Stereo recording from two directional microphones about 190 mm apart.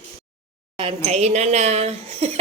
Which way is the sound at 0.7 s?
30° right (ahead or behind).